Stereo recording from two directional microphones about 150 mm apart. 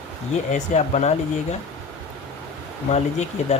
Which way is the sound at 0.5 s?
50° left (ahead or behind).